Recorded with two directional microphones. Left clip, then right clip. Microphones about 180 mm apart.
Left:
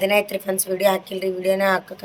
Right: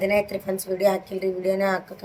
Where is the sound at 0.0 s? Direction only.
5° left (ahead or behind).